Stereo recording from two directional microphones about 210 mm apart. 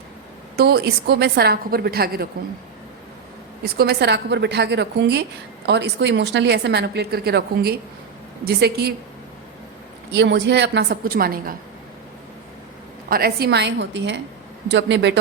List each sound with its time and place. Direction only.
0.5 s a woman's voice: 50° right (ahead or behind)
3.6 s a woman's voice: 50° right (ahead or behind)
10.1 s a woman's voice: 55° right (ahead or behind)
13.1 s a woman's voice: 45° right (ahead or behind)